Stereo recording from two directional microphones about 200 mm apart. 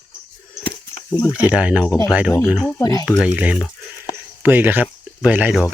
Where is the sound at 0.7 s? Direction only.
20° left (ahead or behind).